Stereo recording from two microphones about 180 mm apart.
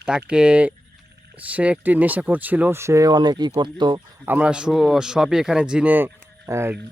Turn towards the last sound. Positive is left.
turn(degrees=-15)  # may be behind; listen again after turning